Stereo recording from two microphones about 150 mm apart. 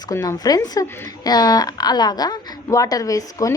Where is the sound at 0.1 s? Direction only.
25° left (ahead or behind).